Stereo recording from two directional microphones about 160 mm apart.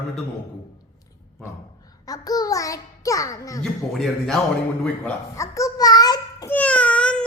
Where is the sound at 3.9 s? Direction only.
Centre (ahead or behind).